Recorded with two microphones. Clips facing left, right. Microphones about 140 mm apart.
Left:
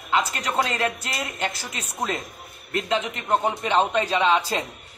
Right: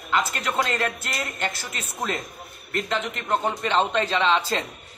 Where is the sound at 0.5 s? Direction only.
5° left (ahead or behind).